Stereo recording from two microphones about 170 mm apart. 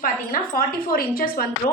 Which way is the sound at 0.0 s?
55° left (ahead or behind).